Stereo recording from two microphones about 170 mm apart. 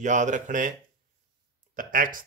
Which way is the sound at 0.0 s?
45° right (ahead or behind).